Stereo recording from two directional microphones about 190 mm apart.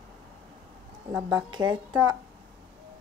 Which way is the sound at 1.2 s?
20° right (ahead or behind).